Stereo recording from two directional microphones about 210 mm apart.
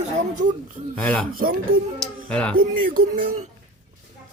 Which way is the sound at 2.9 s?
30° right (ahead or behind).